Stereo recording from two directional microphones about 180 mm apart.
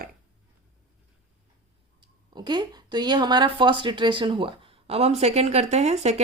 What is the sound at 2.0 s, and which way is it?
Speech, 25° right (ahead or behind).